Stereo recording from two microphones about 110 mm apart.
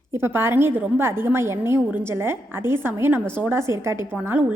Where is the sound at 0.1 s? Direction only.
20° right (ahead or behind).